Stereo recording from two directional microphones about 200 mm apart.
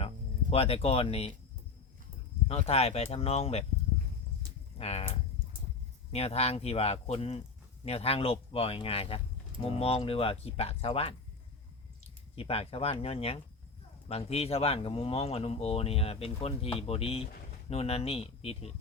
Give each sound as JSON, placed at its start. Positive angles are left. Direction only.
{"t": 0.5, "sound": "speech", "side_deg": 30}
{"t": 2.5, "sound": "speech", "side_deg": 30}
{"t": 4.8, "sound": "speech", "side_deg": 30}
{"t": 12.4, "sound": "speech", "side_deg": 30}